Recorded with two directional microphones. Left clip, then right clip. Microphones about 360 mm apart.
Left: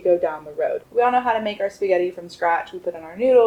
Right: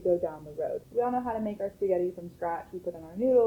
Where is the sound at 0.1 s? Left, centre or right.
Centre.